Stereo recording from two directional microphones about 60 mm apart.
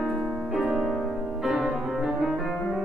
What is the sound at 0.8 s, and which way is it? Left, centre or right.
Piano, centre.